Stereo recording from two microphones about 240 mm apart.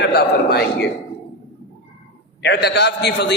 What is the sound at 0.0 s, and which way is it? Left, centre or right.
Speech, left.